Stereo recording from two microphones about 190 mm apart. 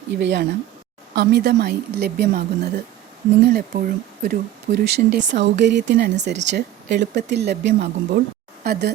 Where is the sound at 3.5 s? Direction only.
50° right (ahead or behind).